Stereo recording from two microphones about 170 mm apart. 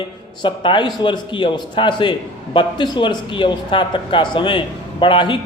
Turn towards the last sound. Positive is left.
turn(degrees=30)  # may be behind; listen again after turning